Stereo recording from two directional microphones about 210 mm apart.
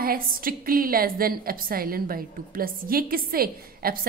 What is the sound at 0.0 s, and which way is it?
A woman's voice, 45° right (ahead or behind).